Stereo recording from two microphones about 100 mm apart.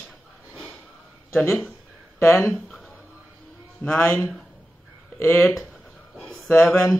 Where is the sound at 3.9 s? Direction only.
25° left (ahead or behind).